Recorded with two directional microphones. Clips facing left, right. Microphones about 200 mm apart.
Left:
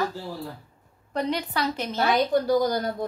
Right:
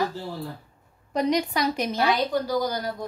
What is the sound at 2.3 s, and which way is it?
Speech, 50° left (ahead or behind).